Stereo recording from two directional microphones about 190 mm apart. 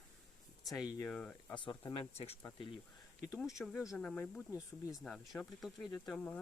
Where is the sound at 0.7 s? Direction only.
Centre (ahead or behind).